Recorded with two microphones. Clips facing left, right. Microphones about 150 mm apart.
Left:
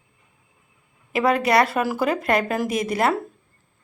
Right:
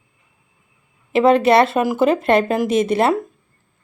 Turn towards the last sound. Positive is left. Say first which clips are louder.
# right 6 dB
turn(degrees=-25)  # may be behind; listen again after turning